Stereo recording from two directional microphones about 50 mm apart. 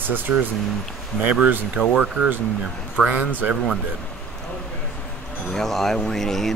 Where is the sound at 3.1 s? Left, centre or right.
Right.